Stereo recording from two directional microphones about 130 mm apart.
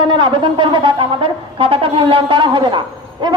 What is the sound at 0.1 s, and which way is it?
A man's voice, 35° right (ahead or behind).